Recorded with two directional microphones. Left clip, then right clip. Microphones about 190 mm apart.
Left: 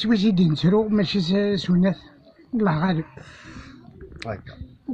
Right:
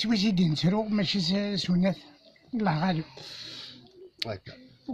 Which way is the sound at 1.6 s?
35° right (ahead or behind).